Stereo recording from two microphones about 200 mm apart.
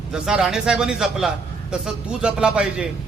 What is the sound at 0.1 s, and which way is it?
A man's voice, 5° right (ahead or behind).